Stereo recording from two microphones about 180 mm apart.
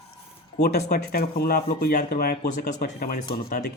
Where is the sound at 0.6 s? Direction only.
65° left (ahead or behind).